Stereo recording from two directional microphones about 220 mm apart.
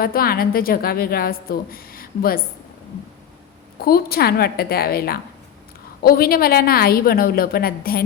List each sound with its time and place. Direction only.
0.0 s a woman's voice: 45° left (ahead or behind)
3.8 s a woman's voice: 45° left (ahead or behind)